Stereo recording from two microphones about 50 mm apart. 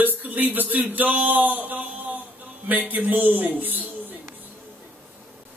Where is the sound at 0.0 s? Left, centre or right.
Right.